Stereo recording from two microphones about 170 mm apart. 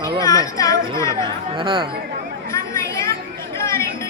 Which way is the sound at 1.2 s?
30° right (ahead or behind).